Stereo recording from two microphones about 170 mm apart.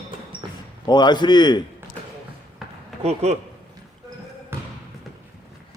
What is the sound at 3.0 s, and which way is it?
Speech, 35° right (ahead or behind).